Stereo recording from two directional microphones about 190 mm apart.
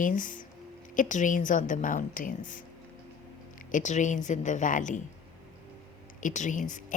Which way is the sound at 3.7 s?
40° left (ahead or behind).